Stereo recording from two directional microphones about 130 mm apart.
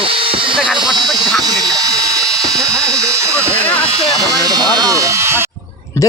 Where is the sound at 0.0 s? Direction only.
45° right (ahead or behind).